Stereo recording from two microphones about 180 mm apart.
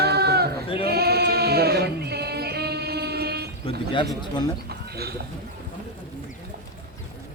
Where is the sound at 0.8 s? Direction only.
60° right (ahead or behind).